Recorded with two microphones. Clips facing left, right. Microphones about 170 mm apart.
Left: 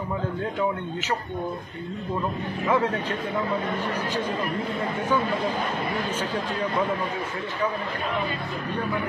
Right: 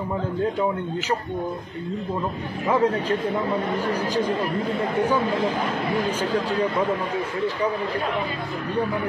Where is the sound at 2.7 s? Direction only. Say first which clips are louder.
Right 4 dB; 35° right (ahead or behind).